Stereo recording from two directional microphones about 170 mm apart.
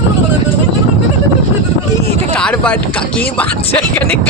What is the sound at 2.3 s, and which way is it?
Speech, 5° left (ahead or behind).